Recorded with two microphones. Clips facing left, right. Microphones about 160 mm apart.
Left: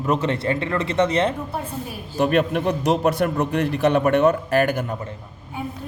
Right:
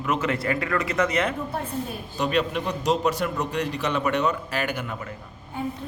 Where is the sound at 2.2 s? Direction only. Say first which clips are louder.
Left 5 dB; 55° left (ahead or behind).